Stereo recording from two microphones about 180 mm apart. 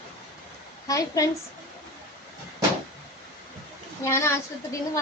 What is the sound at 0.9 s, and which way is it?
Speech, 20° left (ahead or behind).